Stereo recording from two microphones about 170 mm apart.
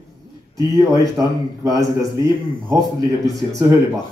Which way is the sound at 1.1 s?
20° right (ahead or behind).